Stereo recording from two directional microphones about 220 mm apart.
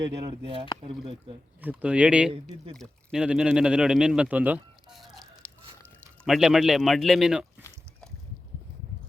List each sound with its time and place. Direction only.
0.3 s speech: 20° right (ahead or behind)
1.6 s speech: 5° right (ahead or behind)
2.3 s speech: 25° right (ahead or behind)
2.7 s speech: centre (ahead or behind)